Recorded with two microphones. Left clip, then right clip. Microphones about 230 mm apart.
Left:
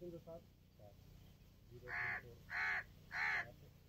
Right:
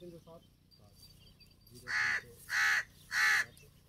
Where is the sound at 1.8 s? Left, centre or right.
Left.